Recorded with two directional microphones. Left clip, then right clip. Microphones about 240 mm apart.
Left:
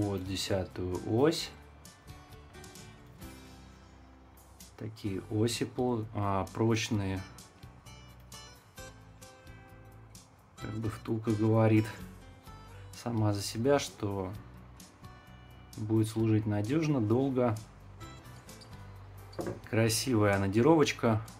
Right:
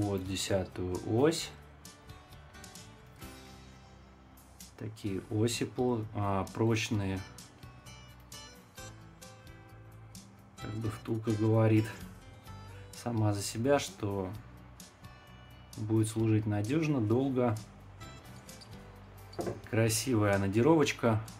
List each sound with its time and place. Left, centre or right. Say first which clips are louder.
0.0 s speech: even; centre
2.5 s music: even; centre
4.7 s speech: even; centre
8.3 s music: right 1 dB; centre
10.9 s speech: left 1 dB; centre
12.4 s music: right 1 dB; centre
13.9 s speech: even; centre
15.9 s speech: left 1 dB; centre
18.0 s music: left 1 dB; centre
19.3 s speech: even; centre
19.8 s speech: left 2 dB; centre